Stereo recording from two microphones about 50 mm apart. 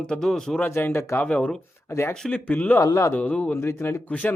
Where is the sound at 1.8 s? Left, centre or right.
Left.